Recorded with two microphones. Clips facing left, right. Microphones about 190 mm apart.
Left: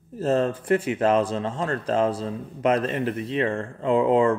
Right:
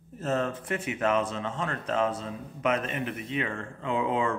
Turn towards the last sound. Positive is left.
turn(degrees=35)  # may be behind; listen again after turning